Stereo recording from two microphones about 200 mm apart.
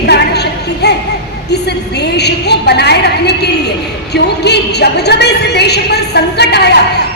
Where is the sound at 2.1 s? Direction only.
55° left (ahead or behind).